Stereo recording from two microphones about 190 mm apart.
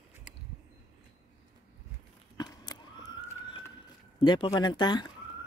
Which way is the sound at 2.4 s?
20° left (ahead or behind).